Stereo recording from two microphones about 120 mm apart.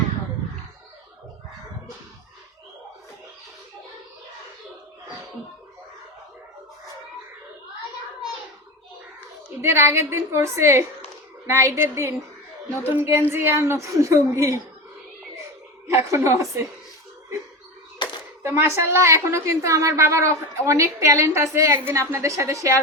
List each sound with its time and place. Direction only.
9.6 s a woman's voice: 20° right (ahead or behind)
12.8 s music: 15° right (ahead or behind)
13.3 s a woman's voice: 20° right (ahead or behind)
16.1 s a woman's voice: 25° right (ahead or behind)
18.4 s a woman's voice: 25° right (ahead or behind)